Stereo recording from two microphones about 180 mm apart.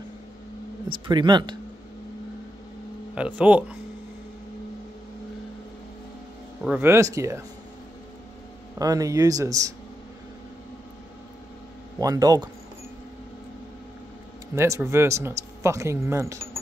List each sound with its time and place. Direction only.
0.8 s speech: 25° right (ahead or behind)
3.2 s speech: 5° right (ahead or behind)
6.6 s speech: 10° right (ahead or behind)
8.7 s speech: 20° right (ahead or behind)
12.0 s speech: 20° right (ahead or behind)
14.5 s speech: 15° right (ahead or behind)